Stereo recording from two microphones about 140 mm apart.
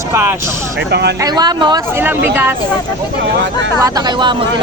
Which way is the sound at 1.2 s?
30° right (ahead or behind).